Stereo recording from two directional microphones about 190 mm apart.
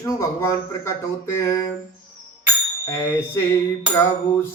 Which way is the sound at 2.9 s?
10° left (ahead or behind).